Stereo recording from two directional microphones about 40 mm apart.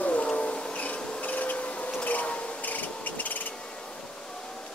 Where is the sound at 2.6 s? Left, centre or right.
Left.